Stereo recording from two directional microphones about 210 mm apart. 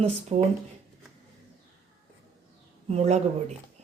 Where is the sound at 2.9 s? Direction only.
30° right (ahead or behind).